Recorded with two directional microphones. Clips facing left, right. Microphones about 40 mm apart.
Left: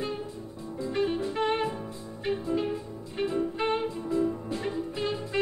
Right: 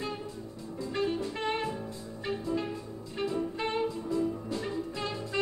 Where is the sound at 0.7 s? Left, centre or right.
Left.